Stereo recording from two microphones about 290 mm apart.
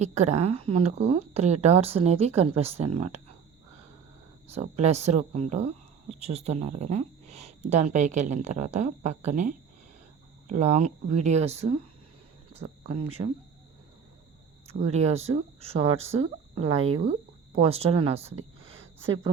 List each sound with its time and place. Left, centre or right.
0.0 s speech: right
4.4 s speech: right
14.7 s speech: right